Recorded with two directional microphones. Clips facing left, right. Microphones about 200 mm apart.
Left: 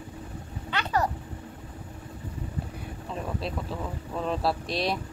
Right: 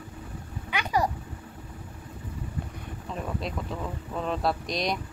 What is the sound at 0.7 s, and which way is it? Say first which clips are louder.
Vehicle: right 1 dB; 10° right (ahead or behind).